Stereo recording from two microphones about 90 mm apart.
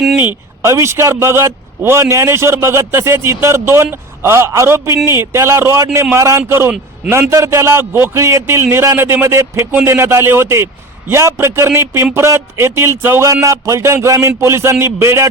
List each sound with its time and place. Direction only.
0.6 s a man's voice: 30° right (ahead or behind)
13.2 s a man's voice: 35° right (ahead or behind)